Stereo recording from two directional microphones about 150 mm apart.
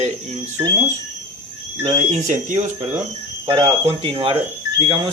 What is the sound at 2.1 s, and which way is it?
Speech, 55° right (ahead or behind).